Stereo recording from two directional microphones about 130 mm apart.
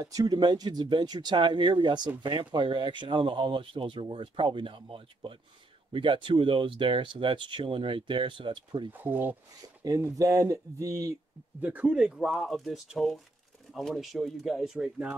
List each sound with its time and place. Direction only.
0.0 s speech: 30° right (ahead or behind)
8.9 s speech: 15° right (ahead or behind)
9.8 s speech: 25° right (ahead or behind)
11.6 s speech: 10° right (ahead or behind)